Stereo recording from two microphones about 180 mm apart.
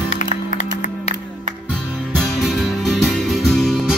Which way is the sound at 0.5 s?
40° left (ahead or behind).